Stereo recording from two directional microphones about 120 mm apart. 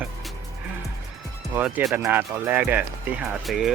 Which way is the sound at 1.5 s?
15° right (ahead or behind).